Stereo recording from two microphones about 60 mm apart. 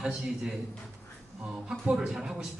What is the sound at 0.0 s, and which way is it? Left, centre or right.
Speech, centre.